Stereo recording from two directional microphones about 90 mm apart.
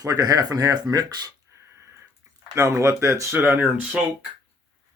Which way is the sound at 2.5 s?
30° right (ahead or behind).